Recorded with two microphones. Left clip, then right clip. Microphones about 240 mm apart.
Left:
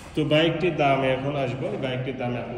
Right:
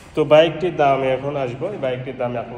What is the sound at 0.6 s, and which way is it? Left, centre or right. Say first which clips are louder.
Speech: right 5 dB; right.